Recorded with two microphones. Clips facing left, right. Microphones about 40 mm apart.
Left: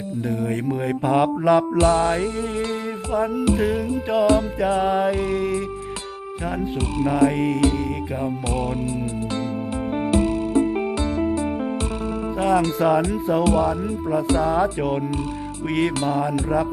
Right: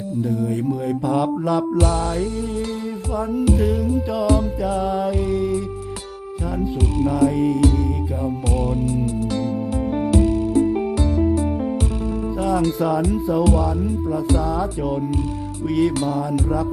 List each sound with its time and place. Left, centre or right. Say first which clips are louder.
0.3 s music: right 1 dB; left
7.0 s music: right 1 dB; left
10.1 s music: right 1 dB; left